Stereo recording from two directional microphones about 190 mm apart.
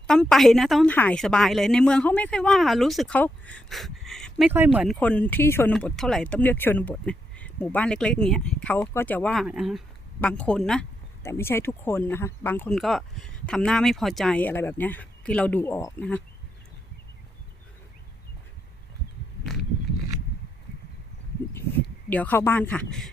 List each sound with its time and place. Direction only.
0.1 s a woman's voice: centre (ahead or behind)
4.5 s speech: 10° right (ahead or behind)
4.9 s a woman's voice: 5° left (ahead or behind)
22.1 s speech: 10° left (ahead or behind)